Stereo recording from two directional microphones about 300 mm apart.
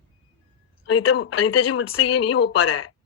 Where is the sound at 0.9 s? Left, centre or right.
Left.